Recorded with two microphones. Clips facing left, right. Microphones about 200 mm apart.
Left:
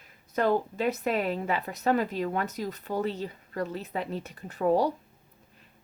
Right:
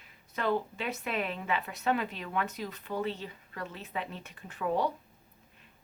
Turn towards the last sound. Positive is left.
turn(degrees=40)  # may be behind; listen again after turning